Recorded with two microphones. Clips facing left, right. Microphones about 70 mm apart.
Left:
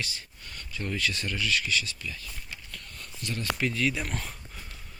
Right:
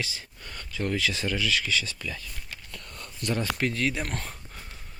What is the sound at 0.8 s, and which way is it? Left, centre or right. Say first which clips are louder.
Speech: right 5 dB; right.